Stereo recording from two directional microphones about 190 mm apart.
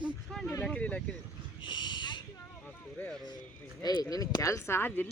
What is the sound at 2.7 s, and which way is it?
Speech, 5° left (ahead or behind).